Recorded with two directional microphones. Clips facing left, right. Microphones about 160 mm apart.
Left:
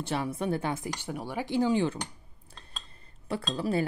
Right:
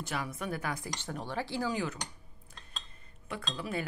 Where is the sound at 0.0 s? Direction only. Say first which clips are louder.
Left 6 dB; 30° left (ahead or behind).